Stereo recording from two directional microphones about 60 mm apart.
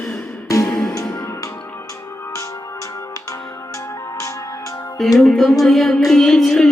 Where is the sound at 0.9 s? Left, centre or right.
Left.